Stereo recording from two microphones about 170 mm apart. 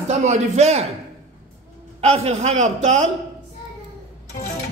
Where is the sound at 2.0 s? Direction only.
40° right (ahead or behind).